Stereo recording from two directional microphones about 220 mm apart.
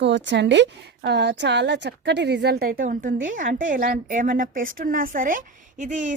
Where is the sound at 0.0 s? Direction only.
55° right (ahead or behind).